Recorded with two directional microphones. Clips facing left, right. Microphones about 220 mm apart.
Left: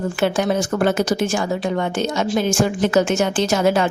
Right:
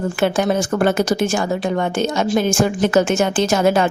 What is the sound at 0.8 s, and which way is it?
Speech, 50° right (ahead or behind).